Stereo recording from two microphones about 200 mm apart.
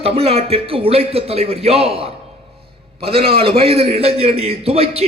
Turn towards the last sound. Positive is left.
turn(degrees=-30)  # may be behind; listen again after turning